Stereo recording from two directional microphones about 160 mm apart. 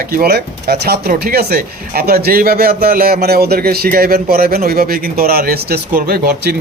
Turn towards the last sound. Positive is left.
turn(degrees=-75)  # may be behind; listen again after turning